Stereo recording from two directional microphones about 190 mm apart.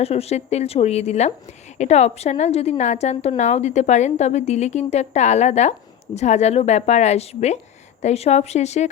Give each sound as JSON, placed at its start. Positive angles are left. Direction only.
{"t": 0.0, "sound": "a woman's voice", "side_deg": 35}